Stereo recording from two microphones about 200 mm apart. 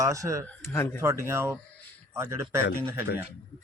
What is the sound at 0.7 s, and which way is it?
Speech, 15° left (ahead or behind).